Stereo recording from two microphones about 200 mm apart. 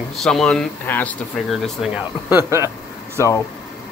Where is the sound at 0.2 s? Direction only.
5° left (ahead or behind).